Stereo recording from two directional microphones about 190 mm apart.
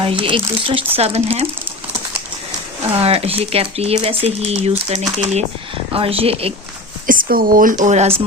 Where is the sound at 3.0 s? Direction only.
30° right (ahead or behind).